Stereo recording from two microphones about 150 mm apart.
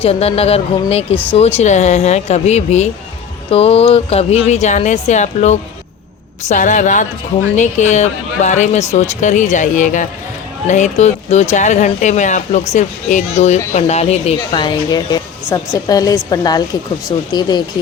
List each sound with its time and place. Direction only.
0.0 s speech: 40° left (ahead or behind)
1.1 s speech: 10° left (ahead or behind)
1.4 s a woman's voice: 45° left (ahead or behind); by 17.6 s 30° left (ahead or behind)